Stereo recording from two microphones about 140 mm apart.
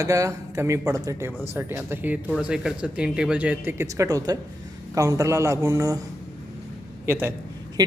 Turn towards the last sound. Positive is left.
turn(degrees=-30)  # may be behind; listen again after turning